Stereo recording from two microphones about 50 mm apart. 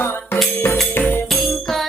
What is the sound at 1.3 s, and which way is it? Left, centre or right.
Music, centre.